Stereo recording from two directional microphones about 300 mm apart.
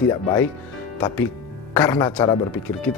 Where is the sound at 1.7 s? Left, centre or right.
Centre.